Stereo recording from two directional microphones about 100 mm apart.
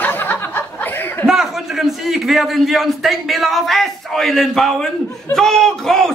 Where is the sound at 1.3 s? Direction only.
Centre (ahead or behind).